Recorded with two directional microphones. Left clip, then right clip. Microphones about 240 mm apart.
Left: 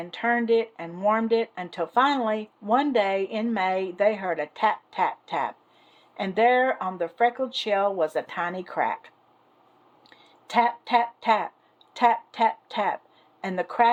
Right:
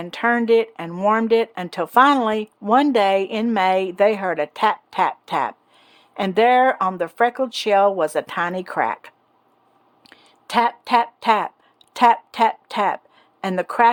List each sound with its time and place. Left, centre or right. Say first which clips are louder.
0.0 s speech: right 5 dB; right
10.0 s a sound: right 5 dB; right
11.9 s speech: right 6 dB; right